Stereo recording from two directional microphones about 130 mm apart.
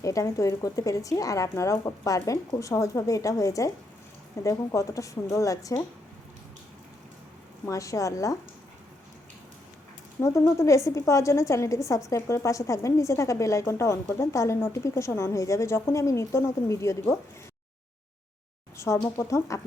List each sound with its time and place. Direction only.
0.0 s a woman's voice: 25° left (ahead or behind)
7.6 s a woman's voice: 25° left (ahead or behind)
10.2 s a woman's voice: 20° left (ahead or behind)
18.8 s a woman's voice: 20° left (ahead or behind)